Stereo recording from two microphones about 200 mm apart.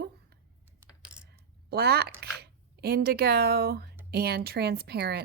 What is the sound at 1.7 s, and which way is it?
Speech, 50° right (ahead or behind).